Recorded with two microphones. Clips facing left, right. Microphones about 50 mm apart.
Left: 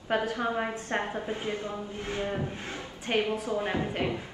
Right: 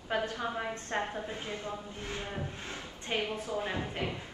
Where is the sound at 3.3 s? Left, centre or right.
Left.